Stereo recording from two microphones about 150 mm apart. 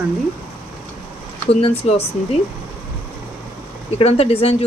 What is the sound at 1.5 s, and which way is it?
Speech, 45° left (ahead or behind).